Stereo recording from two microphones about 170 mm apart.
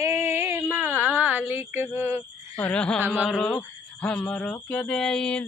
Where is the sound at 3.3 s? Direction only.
5° left (ahead or behind).